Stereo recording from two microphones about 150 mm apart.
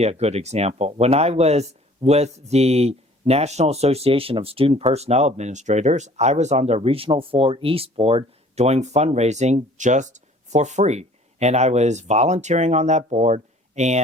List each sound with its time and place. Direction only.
0.0 s speech: 45° right (ahead or behind)